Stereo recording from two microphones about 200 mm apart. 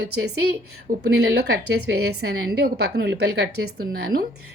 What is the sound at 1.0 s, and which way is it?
A woman's voice, 55° right (ahead or behind).